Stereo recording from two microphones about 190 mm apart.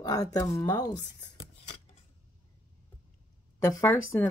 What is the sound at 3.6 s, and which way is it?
Speech, 15° left (ahead or behind).